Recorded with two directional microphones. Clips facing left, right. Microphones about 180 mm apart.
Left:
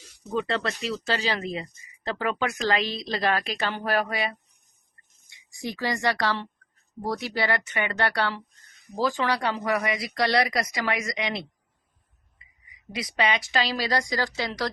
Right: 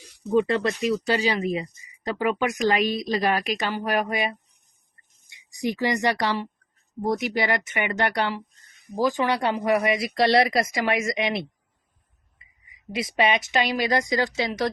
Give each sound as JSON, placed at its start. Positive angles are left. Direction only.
{"t": 0.3, "sound": "speech", "side_deg": -15}
{"t": 12.9, "sound": "speech", "side_deg": -25}